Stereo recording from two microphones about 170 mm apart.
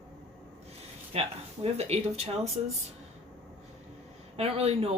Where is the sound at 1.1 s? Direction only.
35° right (ahead or behind).